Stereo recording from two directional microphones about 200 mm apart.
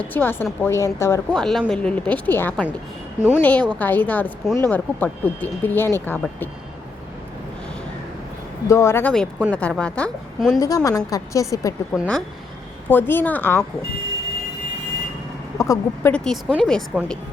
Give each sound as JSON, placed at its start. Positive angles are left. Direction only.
{"t": 0.0, "sound": "speech", "side_deg": 10}
{"t": 1.3, "sound": "speech", "side_deg": 0}
{"t": 3.2, "sound": "speech", "side_deg": -5}
{"t": 3.4, "sound": "speech", "side_deg": 5}
{"t": 8.6, "sound": "speech", "side_deg": 15}
{"t": 10.6, "sound": "speech", "side_deg": 15}
{"t": 11.9, "sound": "speech", "side_deg": 5}
{"t": 15.5, "sound": "speech", "side_deg": 15}